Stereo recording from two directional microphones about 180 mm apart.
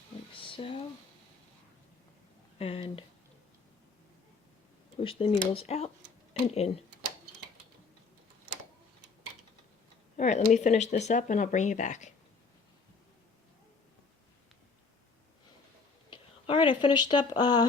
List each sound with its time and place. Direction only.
0.5 s speech: 30° left (ahead or behind)
2.6 s speech: 30° left (ahead or behind)
4.9 s speech: 30° left (ahead or behind)
10.2 s speech: 40° left (ahead or behind)
16.0 s a sound: 30° left (ahead or behind)